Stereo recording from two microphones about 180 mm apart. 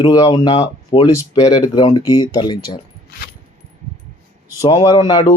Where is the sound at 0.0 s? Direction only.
20° left (ahead or behind).